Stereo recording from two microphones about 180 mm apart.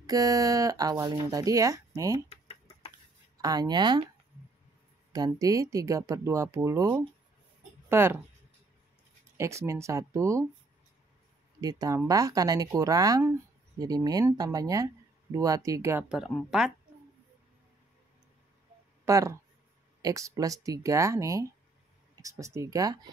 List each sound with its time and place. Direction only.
0.0 s speech: 20° right (ahead or behind)
2.2 s typing: 35° left (ahead or behind)
3.3 s speech: 20° right (ahead or behind)
5.1 s speech: 20° right (ahead or behind)
9.4 s speech: 15° right (ahead or behind)
11.6 s speech: 20° right (ahead or behind); by 16.7 s centre (ahead or behind)
19.0 s speech: 15° right (ahead or behind)